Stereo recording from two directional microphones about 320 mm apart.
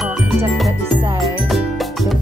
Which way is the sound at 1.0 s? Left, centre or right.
Centre.